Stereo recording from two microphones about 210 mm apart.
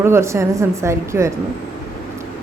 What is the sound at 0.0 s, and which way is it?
A woman's voice, 10° right (ahead or behind).